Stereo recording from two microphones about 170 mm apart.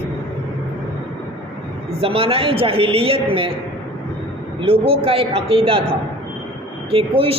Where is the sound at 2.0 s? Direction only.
35° right (ahead or behind).